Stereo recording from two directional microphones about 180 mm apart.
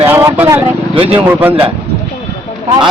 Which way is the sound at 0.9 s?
30° right (ahead or behind).